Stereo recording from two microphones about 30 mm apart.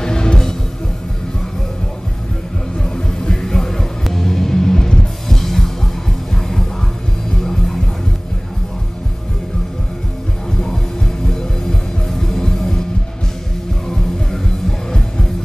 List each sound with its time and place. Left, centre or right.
0.0 s music: left
3.2 s music: left
3.5 s music: centre
7.3 s music: centre
11.2 s music: centre
13.8 s music: centre